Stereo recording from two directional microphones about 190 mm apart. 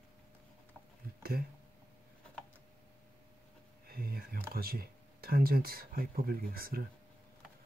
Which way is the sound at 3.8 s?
50° right (ahead or behind).